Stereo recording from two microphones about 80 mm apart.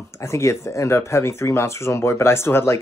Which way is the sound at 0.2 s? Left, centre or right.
Left.